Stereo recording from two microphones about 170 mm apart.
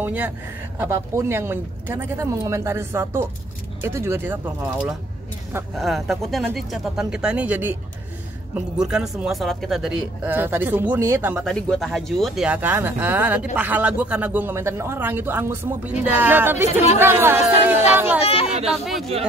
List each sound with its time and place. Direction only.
0.0 s speech: 10° right (ahead or behind)
5.8 s speech: centre (ahead or behind)
11.4 s speech: 5° left (ahead or behind)
18.2 s speech: 35° left (ahead or behind)